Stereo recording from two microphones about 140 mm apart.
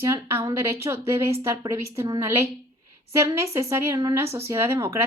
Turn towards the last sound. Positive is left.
turn(degrees=-20)  # may be behind; listen again after turning